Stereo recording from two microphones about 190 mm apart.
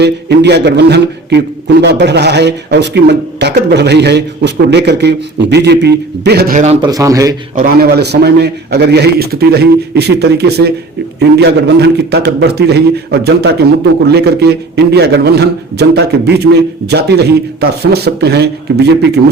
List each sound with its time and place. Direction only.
0.0 s a man's voice: 60° right (ahead or behind)
6.8 s speech: 20° right (ahead or behind)
7.5 s a man's voice: 50° right (ahead or behind)